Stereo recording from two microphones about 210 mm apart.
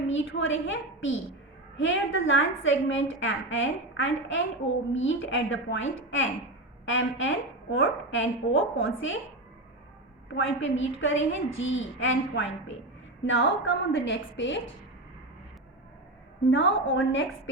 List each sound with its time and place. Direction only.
0.1 s a woman's voice: 65° left (ahead or behind)
10.2 s a woman's voice: 65° left (ahead or behind)
16.5 s a woman's voice: 60° left (ahead or behind)